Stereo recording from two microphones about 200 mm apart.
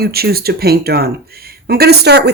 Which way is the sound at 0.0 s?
50° right (ahead or behind).